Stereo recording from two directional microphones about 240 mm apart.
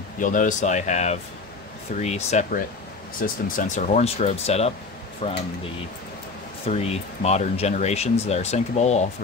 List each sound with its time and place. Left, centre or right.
0.2 s speech: left
6.7 s speech: left